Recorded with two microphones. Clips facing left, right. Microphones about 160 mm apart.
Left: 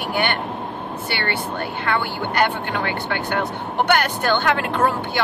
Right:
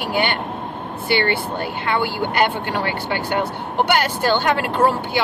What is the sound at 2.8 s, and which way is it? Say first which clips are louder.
Speech: right 1 dB; 50° left (ahead or behind).